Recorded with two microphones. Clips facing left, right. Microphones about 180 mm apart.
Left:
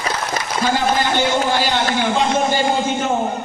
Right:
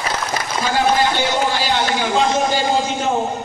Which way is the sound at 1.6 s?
55° left (ahead or behind).